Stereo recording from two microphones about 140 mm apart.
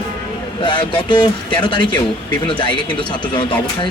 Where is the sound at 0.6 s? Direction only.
35° left (ahead or behind).